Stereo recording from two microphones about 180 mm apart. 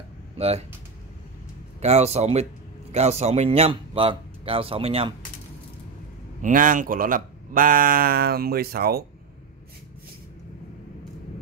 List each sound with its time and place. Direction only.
0.4 s speech: 35° right (ahead or behind)
1.8 s speech: 35° right (ahead or behind)
6.4 s speech: 50° right (ahead or behind)